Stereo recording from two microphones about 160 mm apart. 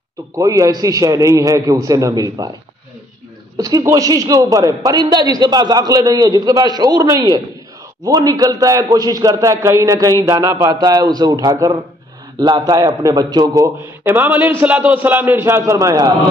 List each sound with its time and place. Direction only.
0.4 s a man's voice: 20° right (ahead or behind)
3.5 s a man's voice: 20° right (ahead or behind)